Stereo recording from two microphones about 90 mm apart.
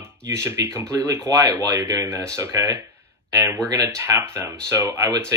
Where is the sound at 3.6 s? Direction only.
40° right (ahead or behind).